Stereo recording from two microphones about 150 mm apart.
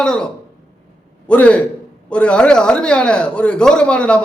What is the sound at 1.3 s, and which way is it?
A man's voice, 10° left (ahead or behind).